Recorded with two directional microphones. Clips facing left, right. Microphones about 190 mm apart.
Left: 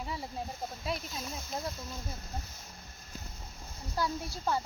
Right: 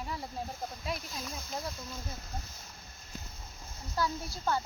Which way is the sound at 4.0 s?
5° left (ahead or behind).